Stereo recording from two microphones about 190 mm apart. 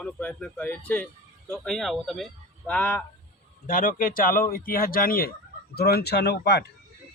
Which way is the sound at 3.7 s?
45° left (ahead or behind).